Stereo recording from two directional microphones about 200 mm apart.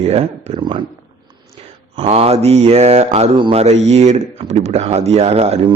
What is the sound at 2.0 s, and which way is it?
Mantra, 30° right (ahead or behind).